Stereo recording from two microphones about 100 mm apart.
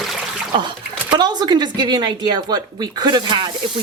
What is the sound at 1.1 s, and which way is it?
Speech, 50° right (ahead or behind).